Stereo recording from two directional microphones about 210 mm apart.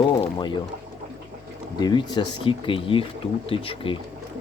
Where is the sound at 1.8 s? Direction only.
20° left (ahead or behind).